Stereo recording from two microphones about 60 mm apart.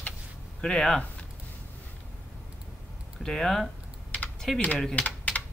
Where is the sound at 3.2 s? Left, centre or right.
Centre.